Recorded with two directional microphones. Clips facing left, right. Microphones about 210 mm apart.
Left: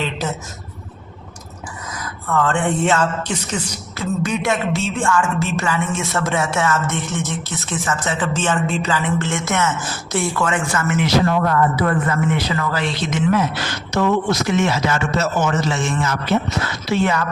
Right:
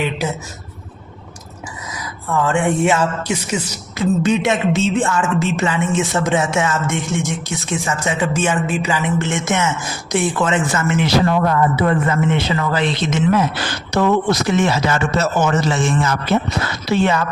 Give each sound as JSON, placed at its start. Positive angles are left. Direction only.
{"t": 2.3, "sound": "speech", "side_deg": -10}
{"t": 3.9, "sound": "speech", "side_deg": -25}
{"t": 13.9, "sound": "a man's voice", "side_deg": -35}